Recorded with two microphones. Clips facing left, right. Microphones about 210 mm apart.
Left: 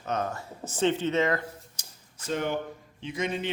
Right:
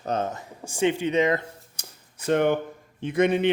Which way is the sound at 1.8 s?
60° right (ahead or behind).